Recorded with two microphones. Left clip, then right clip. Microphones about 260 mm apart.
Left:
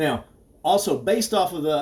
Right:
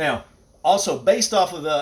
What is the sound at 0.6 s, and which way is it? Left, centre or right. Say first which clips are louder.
Speech: right 3 dB; right.